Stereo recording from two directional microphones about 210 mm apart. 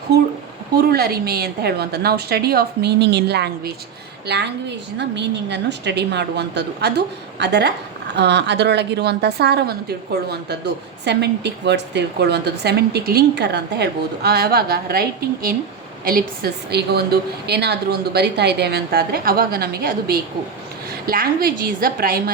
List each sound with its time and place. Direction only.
0.9 s a woman's voice: 45° right (ahead or behind)
11.0 s a woman's voice: 55° right (ahead or behind)